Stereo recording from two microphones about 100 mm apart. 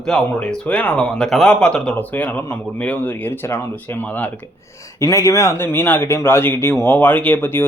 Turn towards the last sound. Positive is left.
turn(degrees=20)  # may be behind; listen again after turning